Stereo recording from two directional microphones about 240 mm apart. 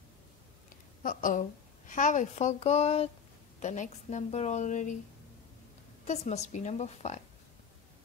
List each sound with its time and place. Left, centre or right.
1.0 s a woman's voice: left
6.0 s a woman's voice: left